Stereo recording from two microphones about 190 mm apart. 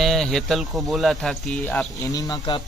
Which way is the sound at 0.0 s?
Centre (ahead or behind).